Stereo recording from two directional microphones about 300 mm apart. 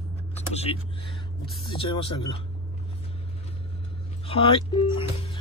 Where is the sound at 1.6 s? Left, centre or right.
Centre.